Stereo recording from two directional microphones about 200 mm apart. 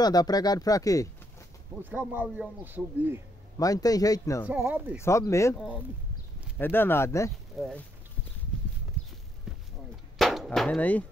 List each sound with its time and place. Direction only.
0.0 s speech: 20° left (ahead or behind)
1.8 s a man's voice: 10° right (ahead or behind)
3.5 s a man's voice: 15° left (ahead or behind)
4.5 s a man's voice: 10° right (ahead or behind)
5.0 s a man's voice: 15° left (ahead or behind)
6.6 s a man's voice: 10° left (ahead or behind)
7.6 s speech: centre (ahead or behind)
10.1 s a sound: centre (ahead or behind)